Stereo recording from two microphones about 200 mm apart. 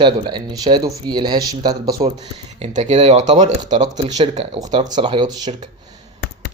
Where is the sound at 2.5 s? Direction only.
35° right (ahead or behind).